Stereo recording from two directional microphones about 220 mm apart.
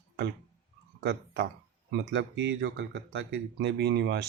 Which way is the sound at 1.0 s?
50° right (ahead or behind).